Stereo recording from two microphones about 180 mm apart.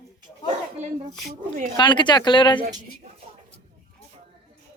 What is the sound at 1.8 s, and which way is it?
Speech, 25° left (ahead or behind).